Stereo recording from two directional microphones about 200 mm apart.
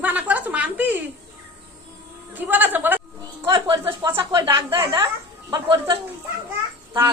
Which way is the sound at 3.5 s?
25° right (ahead or behind).